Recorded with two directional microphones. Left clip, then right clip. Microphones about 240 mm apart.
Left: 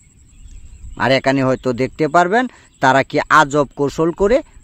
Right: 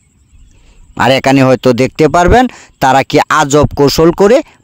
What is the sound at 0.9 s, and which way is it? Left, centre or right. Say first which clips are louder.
Speech: right 7 dB; right.